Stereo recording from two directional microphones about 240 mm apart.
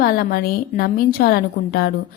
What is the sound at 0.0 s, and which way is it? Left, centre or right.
Speech, left.